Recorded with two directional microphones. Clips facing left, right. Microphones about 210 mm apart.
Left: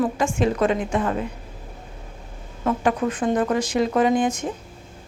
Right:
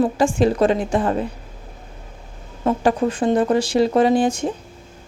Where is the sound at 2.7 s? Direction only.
30° right (ahead or behind).